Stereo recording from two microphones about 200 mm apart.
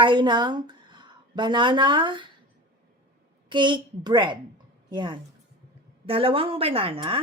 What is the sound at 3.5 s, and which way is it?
A woman's voice, 25° right (ahead or behind).